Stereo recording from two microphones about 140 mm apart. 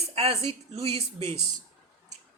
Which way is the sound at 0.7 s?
45° right (ahead or behind).